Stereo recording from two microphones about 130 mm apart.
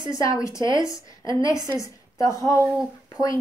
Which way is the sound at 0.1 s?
25° left (ahead or behind).